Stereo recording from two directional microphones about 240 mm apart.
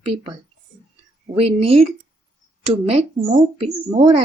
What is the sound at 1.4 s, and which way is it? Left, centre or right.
Speech, right.